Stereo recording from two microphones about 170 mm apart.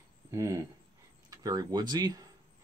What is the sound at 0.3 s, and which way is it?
Speech, 20° right (ahead or behind).